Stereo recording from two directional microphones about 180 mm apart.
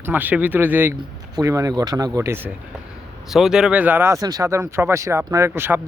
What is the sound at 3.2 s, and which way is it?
Speech, centre (ahead or behind).